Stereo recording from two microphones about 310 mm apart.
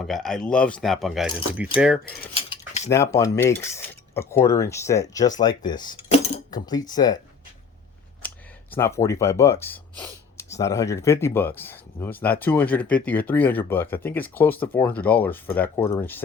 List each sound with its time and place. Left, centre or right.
0.0 s speech: centre
2.3 s cutlery: centre
2.9 s speech: centre
8.7 s speech: centre